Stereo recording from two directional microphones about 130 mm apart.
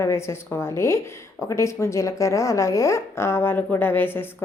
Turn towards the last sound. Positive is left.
turn(degrees=15)  # may be behind; listen again after turning